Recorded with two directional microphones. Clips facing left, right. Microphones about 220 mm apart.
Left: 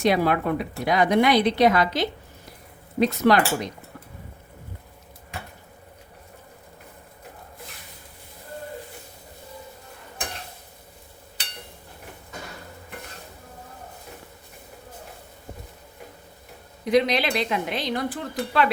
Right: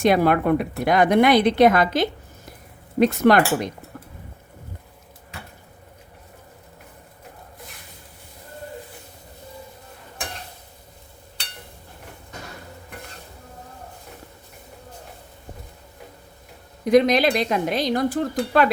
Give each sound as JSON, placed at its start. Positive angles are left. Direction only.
{"t": 0.0, "sound": "a woman's voice", "side_deg": -50}
{"t": 16.8, "sound": "a woman's voice", "side_deg": -45}